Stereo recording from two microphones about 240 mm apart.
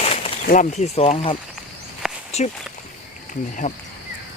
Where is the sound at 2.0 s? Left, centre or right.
Centre.